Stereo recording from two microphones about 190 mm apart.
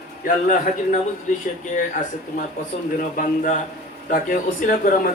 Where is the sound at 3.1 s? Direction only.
45° left (ahead or behind).